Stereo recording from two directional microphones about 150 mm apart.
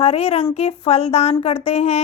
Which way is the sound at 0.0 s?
40° left (ahead or behind).